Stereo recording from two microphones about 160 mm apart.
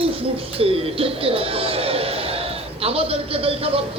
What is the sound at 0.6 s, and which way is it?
Speech, 35° right (ahead or behind).